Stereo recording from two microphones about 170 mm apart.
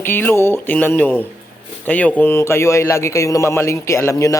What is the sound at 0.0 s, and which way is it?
A man's voice, 10° left (ahead or behind).